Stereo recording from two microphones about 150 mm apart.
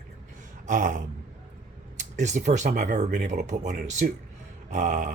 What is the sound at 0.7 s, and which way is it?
Speech, 60° right (ahead or behind).